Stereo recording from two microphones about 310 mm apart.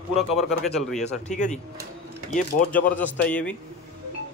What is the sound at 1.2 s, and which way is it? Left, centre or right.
Speech, left.